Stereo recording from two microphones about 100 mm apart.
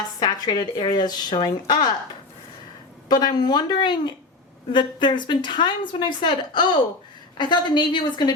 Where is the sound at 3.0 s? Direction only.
45° left (ahead or behind).